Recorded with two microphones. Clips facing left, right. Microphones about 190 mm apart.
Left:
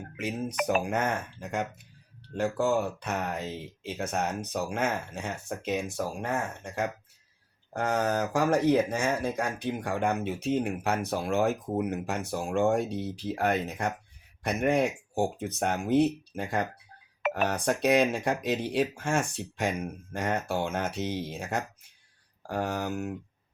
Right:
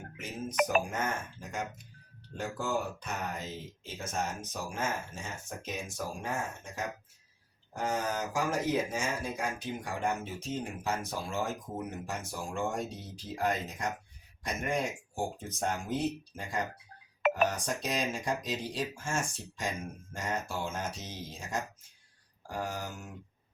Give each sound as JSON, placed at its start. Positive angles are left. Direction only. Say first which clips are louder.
{"t": 0.2, "sound": "speech", "louder": "left 1 dB", "side_deg": 65}
{"t": 7.7, "sound": "speech", "louder": "left 5 dB", "side_deg": 65}